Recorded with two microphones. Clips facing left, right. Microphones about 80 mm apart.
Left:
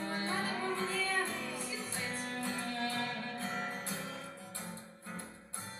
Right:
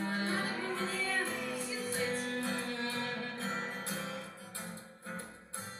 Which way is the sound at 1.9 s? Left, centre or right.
Right.